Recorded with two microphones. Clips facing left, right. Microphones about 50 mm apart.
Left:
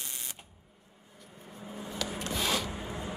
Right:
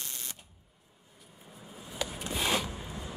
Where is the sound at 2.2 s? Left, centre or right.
Centre.